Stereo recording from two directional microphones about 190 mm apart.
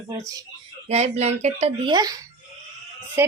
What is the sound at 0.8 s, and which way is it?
Speech, 35° right (ahead or behind).